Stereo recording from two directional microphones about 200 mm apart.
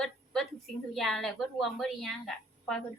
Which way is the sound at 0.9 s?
Centre (ahead or behind).